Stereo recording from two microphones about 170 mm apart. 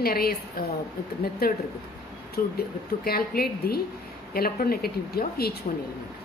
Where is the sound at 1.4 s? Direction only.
65° left (ahead or behind).